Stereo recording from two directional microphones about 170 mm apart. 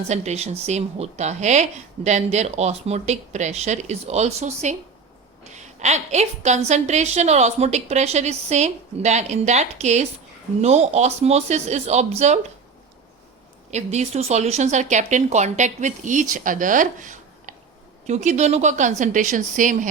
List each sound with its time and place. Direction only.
0.1 s a woman's voice: 40° right (ahead or behind)
13.7 s speech: 40° right (ahead or behind)